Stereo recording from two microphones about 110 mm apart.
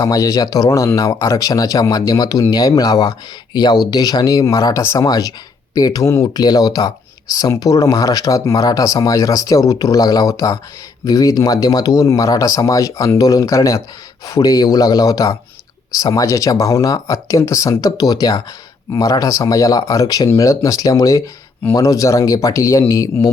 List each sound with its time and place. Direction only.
0.0 s speech: 35° left (ahead or behind)